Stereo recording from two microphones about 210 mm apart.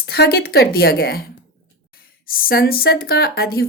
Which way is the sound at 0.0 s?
50° left (ahead or behind).